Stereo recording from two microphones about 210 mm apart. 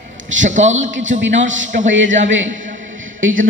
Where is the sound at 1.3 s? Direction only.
60° right (ahead or behind).